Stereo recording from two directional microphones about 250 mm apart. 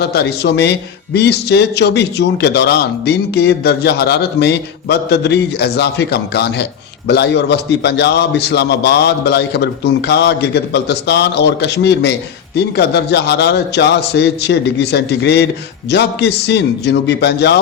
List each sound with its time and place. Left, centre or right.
0.0 s speech: left